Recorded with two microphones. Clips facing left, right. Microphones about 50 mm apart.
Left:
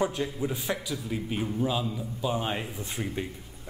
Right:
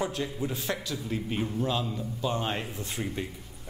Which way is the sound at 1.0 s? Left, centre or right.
Centre.